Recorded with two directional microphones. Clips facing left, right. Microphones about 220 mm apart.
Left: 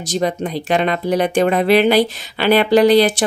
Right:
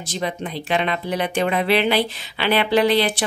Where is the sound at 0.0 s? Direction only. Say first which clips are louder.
Left 7 dB; 40° left (ahead or behind).